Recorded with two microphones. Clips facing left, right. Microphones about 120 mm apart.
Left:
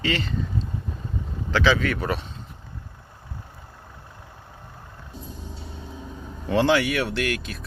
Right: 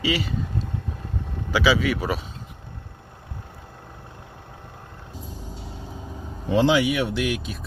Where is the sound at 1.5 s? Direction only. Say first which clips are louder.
Right 1 dB; 10° right (ahead or behind).